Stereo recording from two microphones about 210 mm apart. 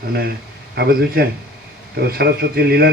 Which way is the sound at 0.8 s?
45° right (ahead or behind).